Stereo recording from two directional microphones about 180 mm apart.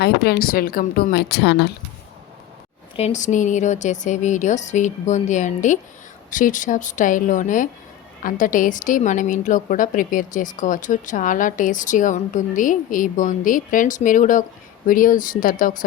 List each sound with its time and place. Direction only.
0.0 s speech: 60° left (ahead or behind)
2.9 s a woman's voice: 40° left (ahead or behind)